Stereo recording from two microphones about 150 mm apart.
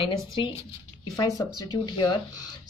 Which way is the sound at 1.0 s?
25° left (ahead or behind).